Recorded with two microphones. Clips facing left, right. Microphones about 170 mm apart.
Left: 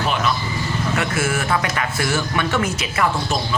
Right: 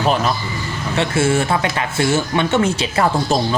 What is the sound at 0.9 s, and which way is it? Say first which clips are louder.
Speech: right 8 dB; 30° right (ahead or behind).